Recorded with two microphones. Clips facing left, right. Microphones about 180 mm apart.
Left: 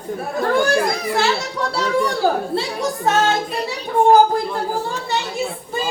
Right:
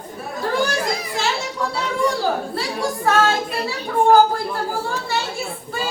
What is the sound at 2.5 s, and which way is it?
Speech, 20° left (ahead or behind).